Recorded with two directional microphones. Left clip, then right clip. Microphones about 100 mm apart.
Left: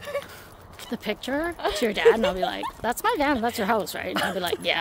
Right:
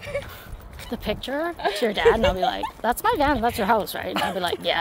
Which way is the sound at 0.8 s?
30° left (ahead or behind).